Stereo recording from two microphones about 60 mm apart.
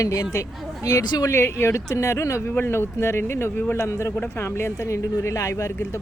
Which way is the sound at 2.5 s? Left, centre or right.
Left.